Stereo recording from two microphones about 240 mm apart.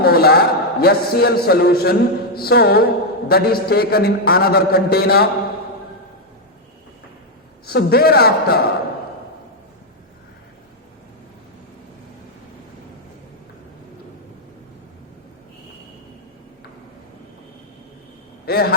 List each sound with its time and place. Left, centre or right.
0.0 s a man's voice: left
7.7 s a man's voice: left
18.4 s a man's voice: left